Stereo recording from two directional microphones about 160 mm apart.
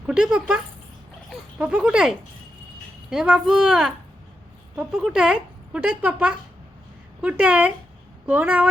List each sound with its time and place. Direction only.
0.1 s speech: 5° right (ahead or behind)